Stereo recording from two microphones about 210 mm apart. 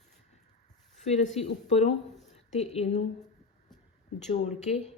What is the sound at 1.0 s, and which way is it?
Speech, 30° left (ahead or behind).